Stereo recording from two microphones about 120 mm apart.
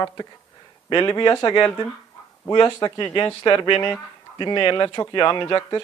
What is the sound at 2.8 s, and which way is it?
Speech, 25° left (ahead or behind).